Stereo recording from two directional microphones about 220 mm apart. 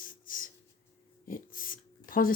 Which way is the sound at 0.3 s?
40° left (ahead or behind).